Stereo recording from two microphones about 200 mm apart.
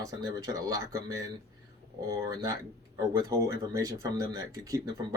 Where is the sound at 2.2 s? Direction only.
15° right (ahead or behind).